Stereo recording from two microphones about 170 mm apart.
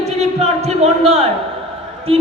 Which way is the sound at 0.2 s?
40° right (ahead or behind).